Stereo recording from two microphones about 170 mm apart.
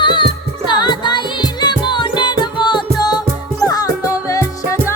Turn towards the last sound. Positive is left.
turn(degrees=20)  # may be behind; listen again after turning